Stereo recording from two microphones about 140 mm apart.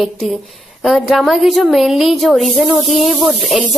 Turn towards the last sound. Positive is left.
turn(degrees=0)  # may be behind; listen again after turning